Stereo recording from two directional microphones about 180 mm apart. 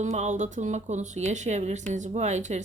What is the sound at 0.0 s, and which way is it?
Speech, 40° right (ahead or behind).